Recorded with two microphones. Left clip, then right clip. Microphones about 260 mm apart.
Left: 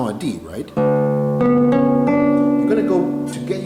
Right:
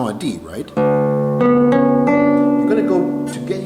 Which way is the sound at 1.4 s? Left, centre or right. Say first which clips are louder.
Right 3 dB; centre.